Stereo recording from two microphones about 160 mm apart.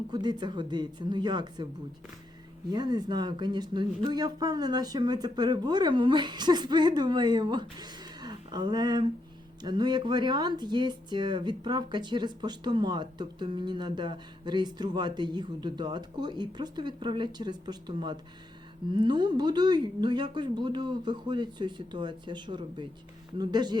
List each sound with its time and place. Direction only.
0.1 s speech: 25° right (ahead or behind)
2.6 s speech: 25° right (ahead or behind)